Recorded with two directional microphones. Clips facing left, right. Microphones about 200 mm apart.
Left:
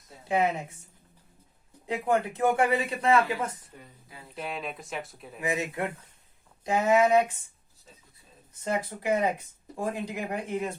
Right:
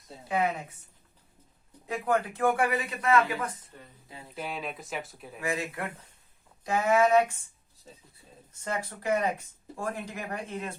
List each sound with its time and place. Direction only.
0.3 s speech: 25° left (ahead or behind)
1.9 s speech: 25° left (ahead or behind)
3.7 s speech: 10° left (ahead or behind)
4.4 s speech: centre (ahead or behind)
5.4 s speech: 20° left (ahead or behind)
8.6 s speech: 20° left (ahead or behind)